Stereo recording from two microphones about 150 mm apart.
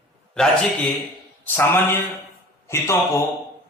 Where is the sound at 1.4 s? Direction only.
15° left (ahead or behind).